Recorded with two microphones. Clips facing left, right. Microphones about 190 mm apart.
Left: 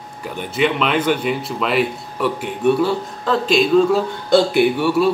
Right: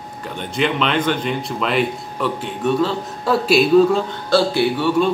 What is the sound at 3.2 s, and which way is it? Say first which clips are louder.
Speech: right 2 dB; 10° right (ahead or behind).